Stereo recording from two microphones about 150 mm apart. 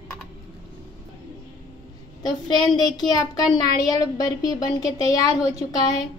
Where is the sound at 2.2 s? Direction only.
30° left (ahead or behind).